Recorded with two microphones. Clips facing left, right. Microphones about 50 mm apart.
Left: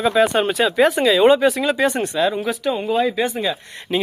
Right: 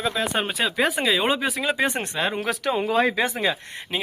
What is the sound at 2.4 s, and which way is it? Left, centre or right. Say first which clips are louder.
Speech: left 2 dB; right.